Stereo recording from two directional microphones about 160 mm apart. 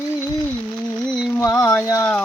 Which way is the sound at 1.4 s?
20° left (ahead or behind).